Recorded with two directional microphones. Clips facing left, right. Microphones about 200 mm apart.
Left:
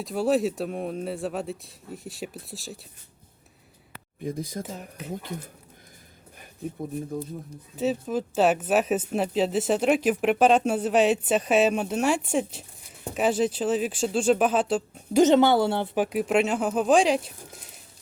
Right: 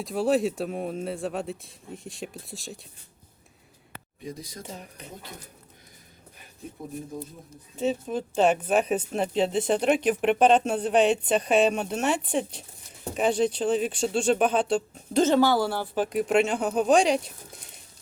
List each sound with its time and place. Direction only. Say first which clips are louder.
0.0 s speech: even; centre (ahead or behind)
4.2 s speech: left 7 dB; 55° left (ahead or behind)
4.6 s speech: left 4 dB; 5° left (ahead or behind)
7.8 s speech: left 1 dB; 5° left (ahead or behind)
15.2 s a woman's voice: left 3 dB; 20° left (ahead or behind)
16.0 s speech: right 1 dB; 5° left (ahead or behind)